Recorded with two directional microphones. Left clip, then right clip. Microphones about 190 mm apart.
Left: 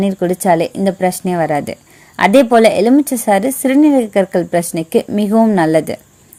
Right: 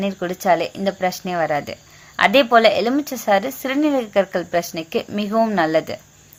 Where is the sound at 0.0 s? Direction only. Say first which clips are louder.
Left 6 dB; 45° left (ahead or behind).